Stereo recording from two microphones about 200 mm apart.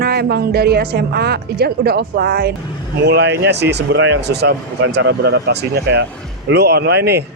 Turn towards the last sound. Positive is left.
turn(degrees=-55)  # may be behind; listen again after turning